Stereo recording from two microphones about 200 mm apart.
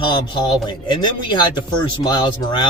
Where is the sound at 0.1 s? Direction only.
20° left (ahead or behind).